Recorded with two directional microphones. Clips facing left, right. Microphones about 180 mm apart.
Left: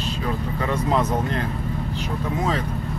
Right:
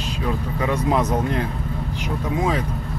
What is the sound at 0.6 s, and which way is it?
Speech, 10° right (ahead or behind).